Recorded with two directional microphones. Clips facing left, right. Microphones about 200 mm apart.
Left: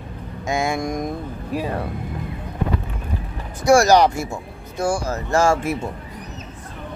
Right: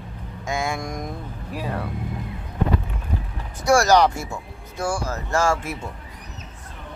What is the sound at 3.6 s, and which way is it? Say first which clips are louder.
Speech: left 3 dB; 10° left (ahead or behind).